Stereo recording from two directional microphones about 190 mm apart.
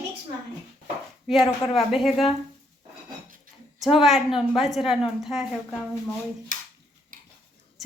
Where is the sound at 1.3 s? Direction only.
Centre (ahead or behind).